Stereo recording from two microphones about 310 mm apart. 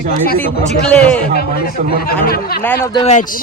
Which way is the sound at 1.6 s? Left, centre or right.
Left.